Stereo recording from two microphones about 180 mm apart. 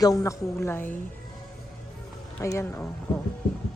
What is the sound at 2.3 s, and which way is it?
Speech, 15° left (ahead or behind).